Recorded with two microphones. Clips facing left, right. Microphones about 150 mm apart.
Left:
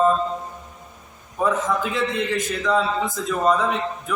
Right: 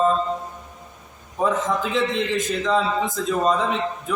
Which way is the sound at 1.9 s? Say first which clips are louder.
Right 1 dB; 20° right (ahead or behind).